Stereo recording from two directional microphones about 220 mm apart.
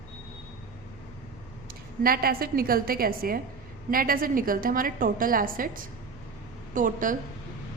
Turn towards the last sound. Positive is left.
turn(degrees=-35)  # may be behind; listen again after turning